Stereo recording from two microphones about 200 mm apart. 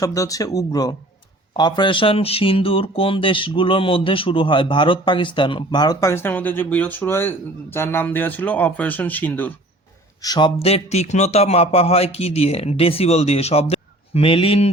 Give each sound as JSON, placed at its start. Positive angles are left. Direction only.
{"t": 0.0, "sound": "speech", "side_deg": 15}
{"t": 10.2, "sound": "a man's voice", "side_deg": 20}